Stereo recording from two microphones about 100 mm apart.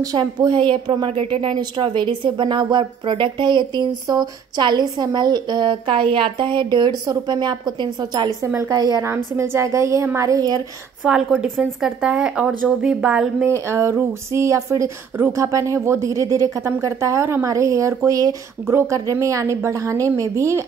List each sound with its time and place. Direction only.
0.0 s speech: 40° right (ahead or behind)
1.1 s speech: 65° right (ahead or behind); by 9.0 s 40° right (ahead or behind)
9.0 s speech: 25° right (ahead or behind)
11.1 s speech: 10° right (ahead or behind)
13.5 s speech: 30° right (ahead or behind)